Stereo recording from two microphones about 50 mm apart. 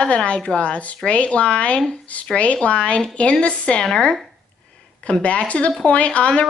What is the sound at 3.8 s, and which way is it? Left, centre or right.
Speech, centre.